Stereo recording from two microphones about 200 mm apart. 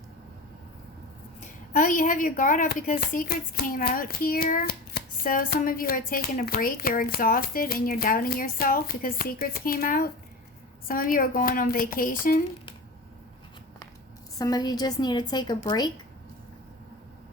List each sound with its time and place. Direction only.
1.7 s a woman's voice: 40° left (ahead or behind)
14.3 s a woman's voice: 20° left (ahead or behind)